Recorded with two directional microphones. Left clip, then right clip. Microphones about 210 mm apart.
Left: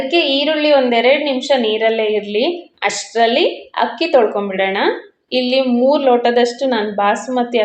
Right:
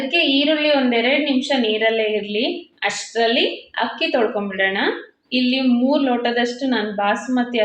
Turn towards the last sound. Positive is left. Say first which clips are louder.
# left 4 dB
turn(degrees=25)  # may be behind; listen again after turning